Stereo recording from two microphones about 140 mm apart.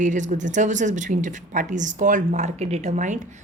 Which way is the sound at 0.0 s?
60° right (ahead or behind).